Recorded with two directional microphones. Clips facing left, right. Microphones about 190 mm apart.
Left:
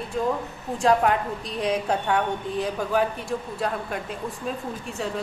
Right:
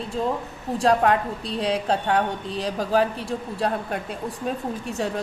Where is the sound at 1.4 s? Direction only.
30° right (ahead or behind).